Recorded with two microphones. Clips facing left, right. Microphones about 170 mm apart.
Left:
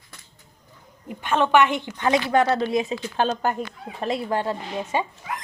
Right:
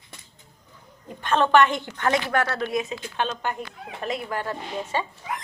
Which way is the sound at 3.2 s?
40° left (ahead or behind).